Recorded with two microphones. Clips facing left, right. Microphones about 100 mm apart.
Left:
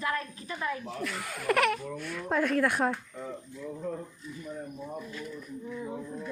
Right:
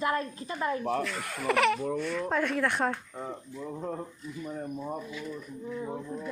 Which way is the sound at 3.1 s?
30° right (ahead or behind).